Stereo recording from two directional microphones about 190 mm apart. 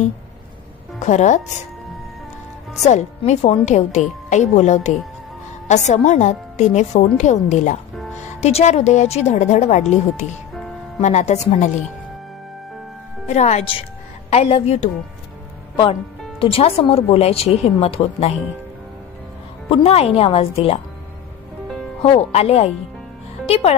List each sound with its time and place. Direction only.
0.9 s speech: 40° left (ahead or behind)
2.8 s speech: 35° left (ahead or behind)
13.3 s speech: 35° left (ahead or behind)
19.7 s speech: 30° left (ahead or behind)
22.0 s speech: 30° left (ahead or behind)